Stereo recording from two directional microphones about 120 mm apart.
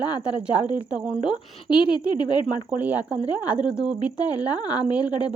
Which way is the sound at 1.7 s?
40° left (ahead or behind).